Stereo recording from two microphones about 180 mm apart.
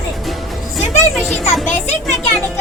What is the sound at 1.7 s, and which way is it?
Speech, 40° left (ahead or behind).